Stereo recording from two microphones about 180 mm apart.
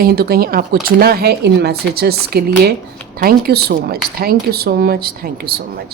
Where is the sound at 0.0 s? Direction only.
60° right (ahead or behind).